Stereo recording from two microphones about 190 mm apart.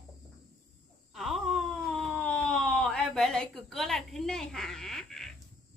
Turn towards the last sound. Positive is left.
turn(degrees=0)  # may be behind; listen again after turning